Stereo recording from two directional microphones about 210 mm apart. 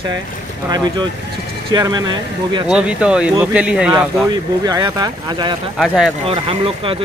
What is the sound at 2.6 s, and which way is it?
Speech, 5° right (ahead or behind).